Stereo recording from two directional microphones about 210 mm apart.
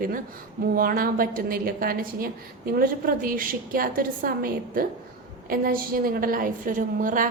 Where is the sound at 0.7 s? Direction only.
45° right (ahead or behind).